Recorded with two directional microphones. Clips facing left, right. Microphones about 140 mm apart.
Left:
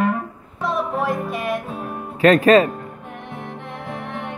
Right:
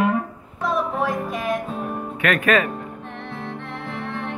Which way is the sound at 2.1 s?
30° left (ahead or behind).